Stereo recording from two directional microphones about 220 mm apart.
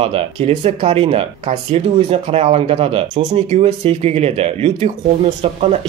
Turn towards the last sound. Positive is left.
turn(degrees=-25)  # may be behind; listen again after turning